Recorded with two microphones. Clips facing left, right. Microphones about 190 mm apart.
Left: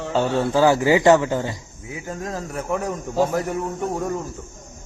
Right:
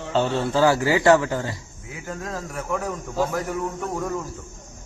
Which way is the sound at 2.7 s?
25° left (ahead or behind).